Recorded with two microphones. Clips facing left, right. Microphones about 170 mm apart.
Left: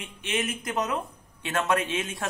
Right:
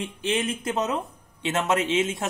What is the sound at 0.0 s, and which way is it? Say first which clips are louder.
A man's voice: right 4 dB; 30° right (ahead or behind).